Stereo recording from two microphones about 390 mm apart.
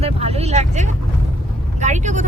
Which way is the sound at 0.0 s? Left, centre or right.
Centre.